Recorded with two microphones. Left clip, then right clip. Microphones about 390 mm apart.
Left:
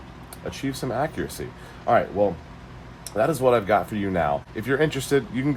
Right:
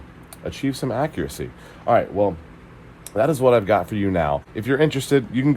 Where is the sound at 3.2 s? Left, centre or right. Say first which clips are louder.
Right 3 dB; centre.